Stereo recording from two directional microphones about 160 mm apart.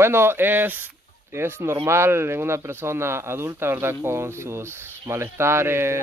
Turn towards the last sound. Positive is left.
turn(degrees=-15)  # may be behind; listen again after turning